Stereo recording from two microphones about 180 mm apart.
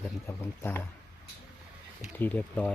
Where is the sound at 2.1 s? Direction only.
10° left (ahead or behind).